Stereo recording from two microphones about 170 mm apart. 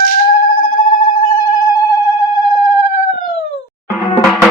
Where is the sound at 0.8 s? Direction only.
25° left (ahead or behind).